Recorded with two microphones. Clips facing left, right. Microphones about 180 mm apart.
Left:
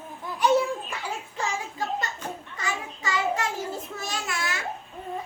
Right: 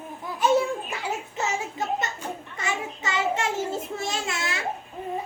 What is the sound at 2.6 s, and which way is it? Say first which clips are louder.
Child singing: right 3 dB; 25° right (ahead or behind).